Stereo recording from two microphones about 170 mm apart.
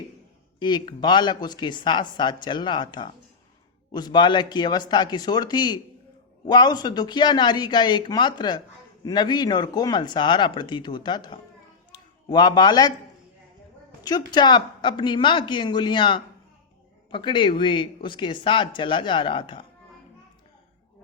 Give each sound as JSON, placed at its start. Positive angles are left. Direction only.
{"t": 0.6, "sound": "speech", "side_deg": 25}
{"t": 11.9, "sound": "a sound", "side_deg": 25}
{"t": 14.0, "sound": "speech", "side_deg": 25}